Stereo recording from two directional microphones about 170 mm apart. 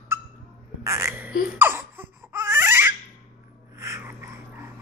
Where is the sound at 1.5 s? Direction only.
15° right (ahead or behind).